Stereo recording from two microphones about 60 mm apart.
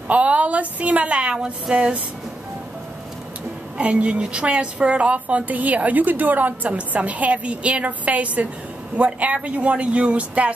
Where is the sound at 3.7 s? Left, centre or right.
Centre.